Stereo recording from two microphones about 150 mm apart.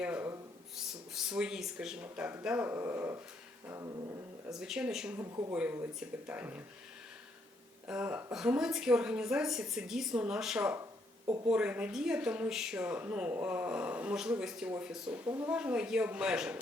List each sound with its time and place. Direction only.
0.0 s a sound: 10° right (ahead or behind)
0.8 s speech: 5° right (ahead or behind); by 3.9 s 20° right (ahead or behind)
4.5 s a woman's voice: 5° right (ahead or behind)
5.2 s speech: 25° right (ahead or behind)
5.5 s speech: 15° right (ahead or behind)
7.9 s a woman's voice: 5° right (ahead or behind)